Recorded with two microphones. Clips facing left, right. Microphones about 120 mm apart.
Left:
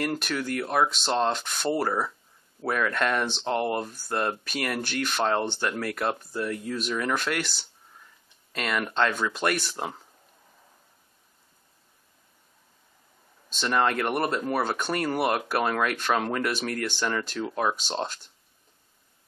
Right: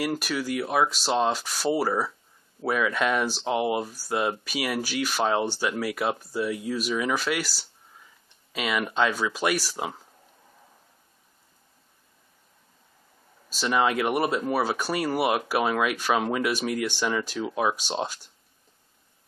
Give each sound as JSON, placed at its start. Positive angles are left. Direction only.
{"t": 0.0, "sound": "speech", "side_deg": -5}
{"t": 13.5, "sound": "speech", "side_deg": -5}